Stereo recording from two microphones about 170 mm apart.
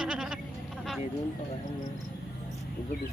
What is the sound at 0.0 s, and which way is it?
Goat, 5° right (ahead or behind).